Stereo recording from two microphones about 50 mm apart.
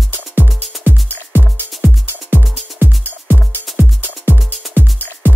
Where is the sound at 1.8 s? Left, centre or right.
Right.